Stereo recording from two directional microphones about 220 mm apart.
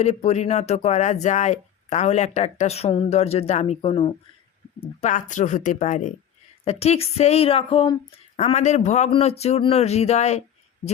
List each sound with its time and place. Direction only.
0.0 s speech: 30° left (ahead or behind)
4.9 s speech: 35° left (ahead or behind)